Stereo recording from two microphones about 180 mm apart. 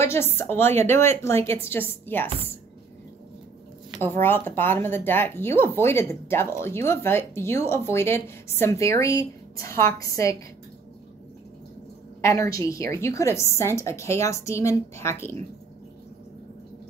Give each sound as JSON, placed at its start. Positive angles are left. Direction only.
{"t": 0.0, "sound": "speech", "side_deg": 15}
{"t": 4.0, "sound": "speech", "side_deg": 10}
{"t": 12.2, "sound": "speech", "side_deg": 15}